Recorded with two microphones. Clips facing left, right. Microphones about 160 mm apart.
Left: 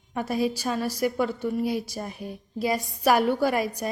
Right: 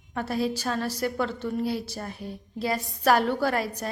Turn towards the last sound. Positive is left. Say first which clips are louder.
# left 2 dB
turn(degrees=15)  # may be behind; listen again after turning